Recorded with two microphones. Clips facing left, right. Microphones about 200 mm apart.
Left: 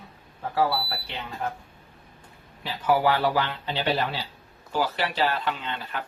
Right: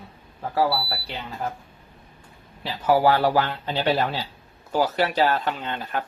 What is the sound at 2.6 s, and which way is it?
A man's voice, 40° right (ahead or behind).